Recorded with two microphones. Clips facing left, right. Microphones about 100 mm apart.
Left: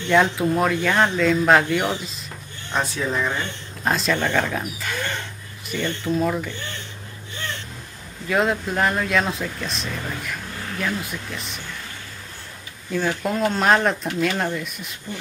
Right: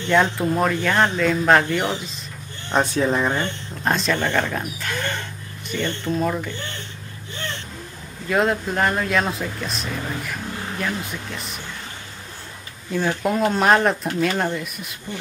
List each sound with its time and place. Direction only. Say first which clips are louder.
0.1 s speech: left 1 dB; centre (ahead or behind)
2.7 s speech: right 5 dB; 25° right (ahead or behind)
3.8 s speech: even; centre (ahead or behind)
8.3 s speech: right 1 dB; centre (ahead or behind)
13.2 s speech: right 4 dB; 5° right (ahead or behind)